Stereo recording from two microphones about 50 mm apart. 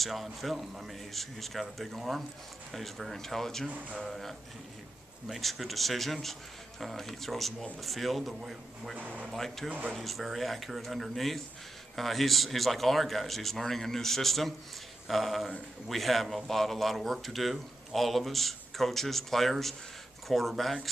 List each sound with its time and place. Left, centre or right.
0.0 s speech: centre
3.6 s speech: right
4.0 s speech: centre
8.9 s speech: right
9.3 s speech: centre